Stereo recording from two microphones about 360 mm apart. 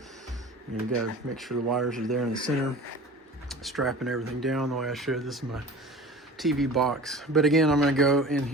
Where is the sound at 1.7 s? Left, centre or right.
Centre.